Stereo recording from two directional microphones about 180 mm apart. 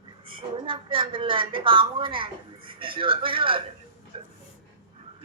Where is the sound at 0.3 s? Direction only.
30° right (ahead or behind).